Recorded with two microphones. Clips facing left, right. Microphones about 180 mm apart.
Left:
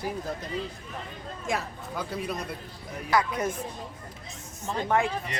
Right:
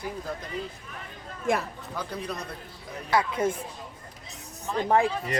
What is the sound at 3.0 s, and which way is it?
Speech, 25° right (ahead or behind).